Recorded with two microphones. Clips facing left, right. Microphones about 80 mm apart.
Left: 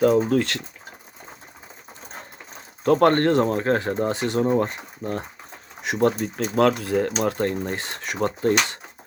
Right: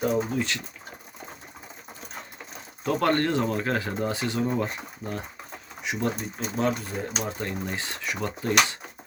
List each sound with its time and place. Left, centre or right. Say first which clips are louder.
0.0 s speech: left 7 dB; left
2.8 s speech: left 7 dB; left
5.8 s speech: left 8 dB; left
6.2 s speech: left 7 dB; left
7.3 s speech: left 7 dB; left